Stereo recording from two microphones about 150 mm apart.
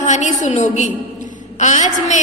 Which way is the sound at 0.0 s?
50° left (ahead or behind).